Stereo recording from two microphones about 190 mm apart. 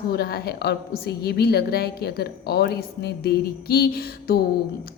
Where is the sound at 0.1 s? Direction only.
55° left (ahead or behind).